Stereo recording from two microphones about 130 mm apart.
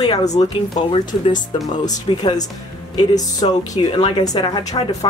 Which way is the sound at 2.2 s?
30° left (ahead or behind).